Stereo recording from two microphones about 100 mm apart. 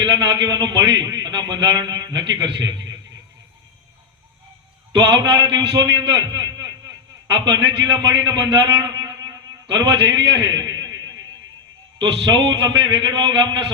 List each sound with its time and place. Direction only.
0.0 s a man's voice: 45° right (ahead or behind)
4.9 s a man's voice: 45° right (ahead or behind)